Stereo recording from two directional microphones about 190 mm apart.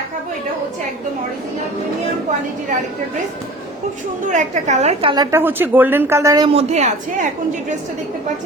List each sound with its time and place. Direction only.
4.3 s a woman's voice: 40° right (ahead or behind)